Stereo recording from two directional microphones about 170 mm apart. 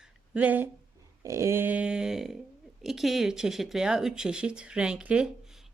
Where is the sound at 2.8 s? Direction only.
Centre (ahead or behind).